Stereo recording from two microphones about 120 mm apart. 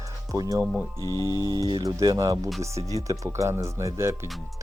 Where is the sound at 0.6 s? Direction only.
Centre (ahead or behind).